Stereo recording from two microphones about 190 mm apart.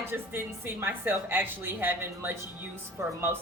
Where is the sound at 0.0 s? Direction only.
10° right (ahead or behind).